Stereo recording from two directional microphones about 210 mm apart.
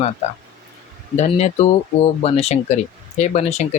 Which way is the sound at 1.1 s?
30° left (ahead or behind).